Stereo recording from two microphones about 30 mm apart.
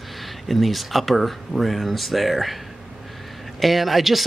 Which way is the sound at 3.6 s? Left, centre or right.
Centre.